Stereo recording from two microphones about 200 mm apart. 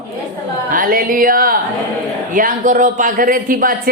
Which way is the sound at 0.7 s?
45° right (ahead or behind).